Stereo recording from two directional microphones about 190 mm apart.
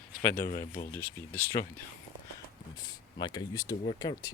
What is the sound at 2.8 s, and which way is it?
Speech, 25° left (ahead or behind).